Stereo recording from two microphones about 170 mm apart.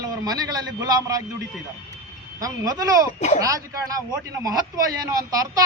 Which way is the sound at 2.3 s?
20° right (ahead or behind).